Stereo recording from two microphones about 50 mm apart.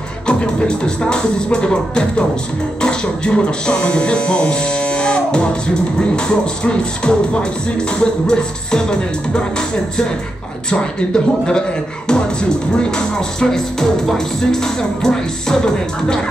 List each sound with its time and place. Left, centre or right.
0.3 s speech: centre